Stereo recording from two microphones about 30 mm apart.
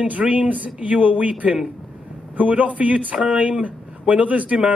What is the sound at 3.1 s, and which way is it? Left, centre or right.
Speech, right.